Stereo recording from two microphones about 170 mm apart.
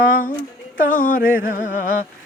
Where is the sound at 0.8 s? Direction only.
55° left (ahead or behind).